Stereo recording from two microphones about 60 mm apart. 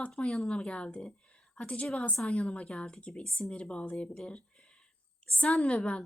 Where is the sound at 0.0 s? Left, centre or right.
Centre.